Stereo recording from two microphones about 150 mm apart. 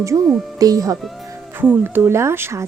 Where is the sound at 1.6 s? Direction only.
15° right (ahead or behind).